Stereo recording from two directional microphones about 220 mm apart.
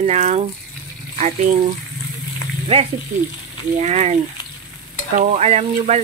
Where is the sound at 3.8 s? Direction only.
30° right (ahead or behind).